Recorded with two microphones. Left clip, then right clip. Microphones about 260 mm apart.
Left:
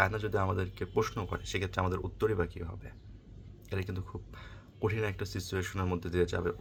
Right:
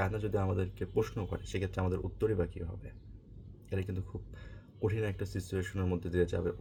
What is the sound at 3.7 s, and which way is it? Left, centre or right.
Speech, centre.